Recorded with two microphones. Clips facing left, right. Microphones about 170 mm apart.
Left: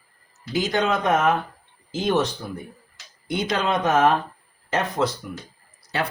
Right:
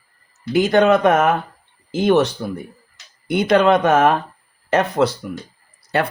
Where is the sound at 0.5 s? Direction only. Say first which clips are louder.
Right 9 dB; 60° right (ahead or behind).